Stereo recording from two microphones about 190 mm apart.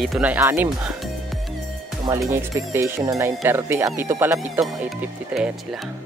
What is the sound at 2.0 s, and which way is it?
Speech, 15° right (ahead or behind).